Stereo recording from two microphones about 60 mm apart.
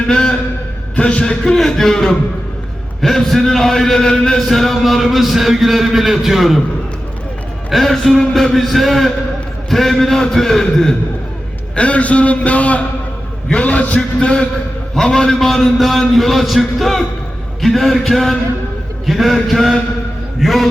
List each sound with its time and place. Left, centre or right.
0.1 s a man's voice: centre
7.7 s a man's voice: centre
11.7 s a man's voice: left; by 20.7 s centre